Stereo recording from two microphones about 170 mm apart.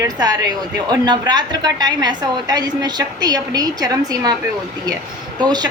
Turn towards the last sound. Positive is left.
turn(degrees=-25)  # may be behind; listen again after turning